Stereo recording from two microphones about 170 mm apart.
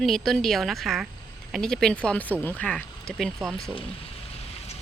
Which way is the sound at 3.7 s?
35° left (ahead or behind).